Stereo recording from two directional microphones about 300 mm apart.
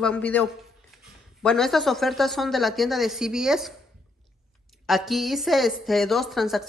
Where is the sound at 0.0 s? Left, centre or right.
Centre.